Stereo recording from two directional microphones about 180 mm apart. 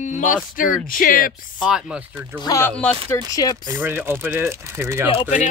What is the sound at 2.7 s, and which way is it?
Speech, 5° left (ahead or behind).